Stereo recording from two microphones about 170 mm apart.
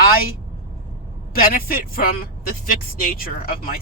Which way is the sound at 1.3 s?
60° left (ahead or behind).